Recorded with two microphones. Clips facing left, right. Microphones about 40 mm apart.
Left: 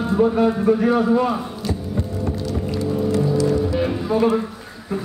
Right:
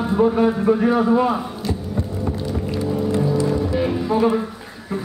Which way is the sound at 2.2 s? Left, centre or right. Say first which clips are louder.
Even; centre.